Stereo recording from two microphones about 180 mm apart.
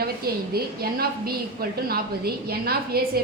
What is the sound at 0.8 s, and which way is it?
A woman's voice, 60° right (ahead or behind).